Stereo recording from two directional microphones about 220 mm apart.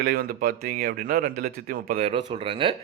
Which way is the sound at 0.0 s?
45° right (ahead or behind).